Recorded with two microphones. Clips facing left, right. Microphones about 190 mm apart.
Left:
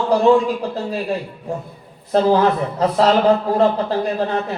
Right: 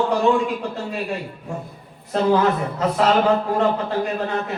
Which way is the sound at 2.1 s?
35° left (ahead or behind).